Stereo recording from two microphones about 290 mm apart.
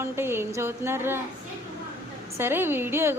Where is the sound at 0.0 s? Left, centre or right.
Centre.